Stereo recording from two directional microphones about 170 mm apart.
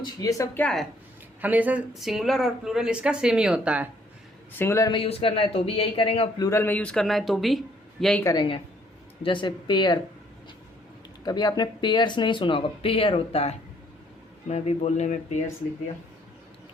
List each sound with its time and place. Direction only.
0.0 s speech: 20° left (ahead or behind)
0.6 s speech: 5° left (ahead or behind)
1.4 s speech: 10° right (ahead or behind)
4.5 s speech: 15° left (ahead or behind)
4.9 s speech: 30° left (ahead or behind)
6.4 s speech: 15° left (ahead or behind); by 7.6 s centre (ahead or behind)
8.2 s speech: 20° left (ahead or behind)
11.3 s speech: 25° left (ahead or behind); by 15.4 s 45° left (ahead or behind)